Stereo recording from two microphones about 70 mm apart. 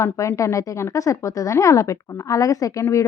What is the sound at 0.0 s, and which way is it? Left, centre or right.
Speech, left.